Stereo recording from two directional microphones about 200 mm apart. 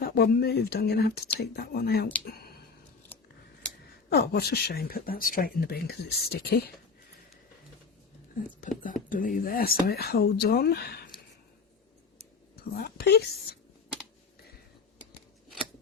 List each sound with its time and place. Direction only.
0.0 s speech: 50° left (ahead or behind)
3.1 s scissors: 10° left (ahead or behind)
4.1 s speech: 55° left (ahead or behind)
8.8 s speech: 40° left (ahead or behind)
12.7 s speech: 50° left (ahead or behind)